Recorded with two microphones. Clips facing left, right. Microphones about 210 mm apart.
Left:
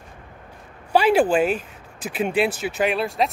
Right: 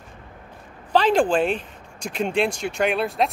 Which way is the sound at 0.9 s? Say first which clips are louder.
Left 1 dB; 10° left (ahead or behind).